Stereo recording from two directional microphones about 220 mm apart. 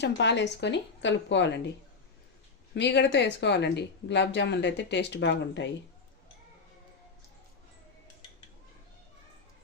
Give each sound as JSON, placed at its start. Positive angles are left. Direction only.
{"t": 0.0, "sound": "speech", "side_deg": 55}
{"t": 2.7, "sound": "speech", "side_deg": 50}